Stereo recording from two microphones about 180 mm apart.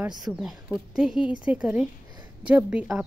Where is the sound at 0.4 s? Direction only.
5° right (ahead or behind).